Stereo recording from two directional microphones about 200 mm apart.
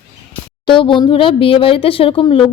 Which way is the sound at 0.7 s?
25° left (ahead or behind).